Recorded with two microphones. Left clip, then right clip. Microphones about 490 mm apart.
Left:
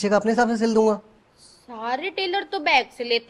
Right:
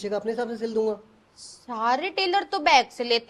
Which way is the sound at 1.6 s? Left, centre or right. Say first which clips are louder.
Right 3 dB; right.